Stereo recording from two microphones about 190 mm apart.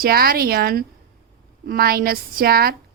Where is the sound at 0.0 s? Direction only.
50° right (ahead or behind).